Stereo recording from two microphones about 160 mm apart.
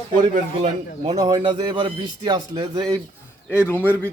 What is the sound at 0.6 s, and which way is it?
Speech, 40° right (ahead or behind).